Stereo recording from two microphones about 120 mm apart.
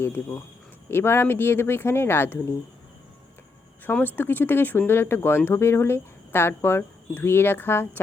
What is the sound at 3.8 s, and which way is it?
Speech, 15° left (ahead or behind).